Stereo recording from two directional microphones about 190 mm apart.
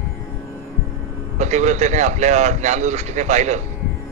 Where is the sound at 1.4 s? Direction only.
40° right (ahead or behind).